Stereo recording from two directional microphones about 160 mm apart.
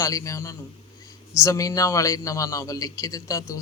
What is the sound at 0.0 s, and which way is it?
A man's voice, 20° left (ahead or behind).